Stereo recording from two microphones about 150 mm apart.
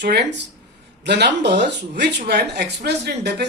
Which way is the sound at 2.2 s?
90° right.